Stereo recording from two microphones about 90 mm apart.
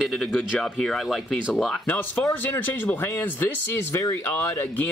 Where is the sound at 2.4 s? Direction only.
20° left (ahead or behind).